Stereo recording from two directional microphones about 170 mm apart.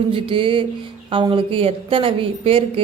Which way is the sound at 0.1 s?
30° right (ahead or behind).